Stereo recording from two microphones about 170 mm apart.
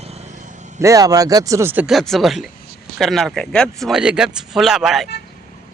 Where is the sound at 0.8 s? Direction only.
20° right (ahead or behind).